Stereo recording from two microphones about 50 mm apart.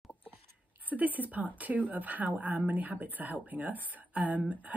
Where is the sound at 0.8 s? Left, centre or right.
Right.